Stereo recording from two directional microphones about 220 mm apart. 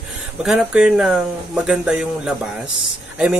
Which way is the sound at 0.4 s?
Centre (ahead or behind).